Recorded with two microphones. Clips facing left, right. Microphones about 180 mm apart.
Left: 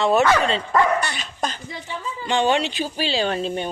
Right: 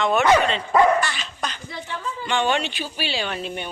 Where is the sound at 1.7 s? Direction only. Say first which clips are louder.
Even; 20° left (ahead or behind).